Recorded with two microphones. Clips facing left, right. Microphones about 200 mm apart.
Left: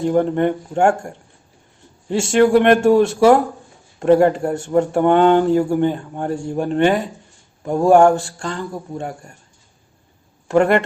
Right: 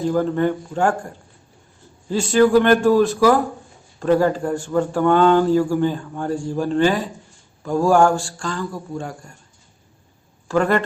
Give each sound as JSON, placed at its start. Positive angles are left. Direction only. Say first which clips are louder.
{"t": 0.1, "sound": "speech", "louder": "left 3 dB", "side_deg": 25}
{"t": 2.0, "sound": "speech", "louder": "left 1 dB", "side_deg": 25}
{"t": 10.5, "sound": "speech", "louder": "left 4 dB", "side_deg": 25}